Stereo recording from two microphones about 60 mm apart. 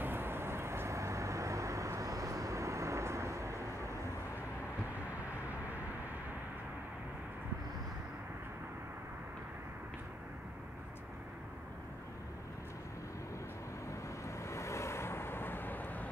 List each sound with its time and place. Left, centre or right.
0.0 s vehicle: right
14.2 s vehicle: left